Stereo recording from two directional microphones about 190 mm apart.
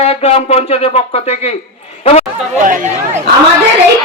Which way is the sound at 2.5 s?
45° right (ahead or behind).